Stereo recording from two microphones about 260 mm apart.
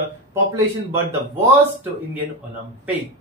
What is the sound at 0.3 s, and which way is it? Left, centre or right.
Speech, centre.